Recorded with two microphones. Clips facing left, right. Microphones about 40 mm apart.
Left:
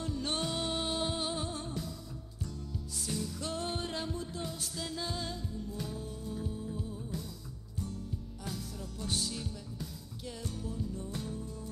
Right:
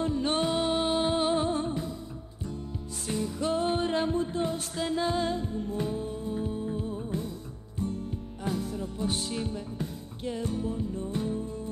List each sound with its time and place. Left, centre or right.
0.0 s music: right
3.1 s music: right
8.5 s music: right